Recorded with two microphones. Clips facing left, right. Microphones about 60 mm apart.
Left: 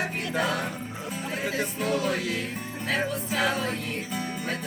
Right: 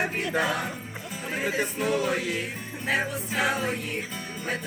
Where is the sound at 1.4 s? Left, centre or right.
Centre.